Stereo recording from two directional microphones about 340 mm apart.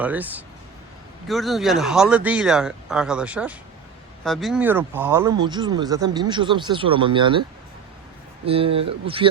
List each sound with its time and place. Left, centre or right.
0.0 s speech: centre
8.4 s speech: centre